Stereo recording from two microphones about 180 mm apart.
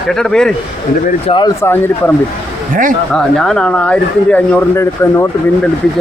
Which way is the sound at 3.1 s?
5° left (ahead or behind).